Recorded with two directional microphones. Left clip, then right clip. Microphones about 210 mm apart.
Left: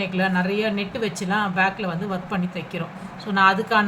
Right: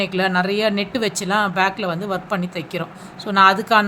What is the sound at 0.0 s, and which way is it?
Speech, 55° right (ahead or behind).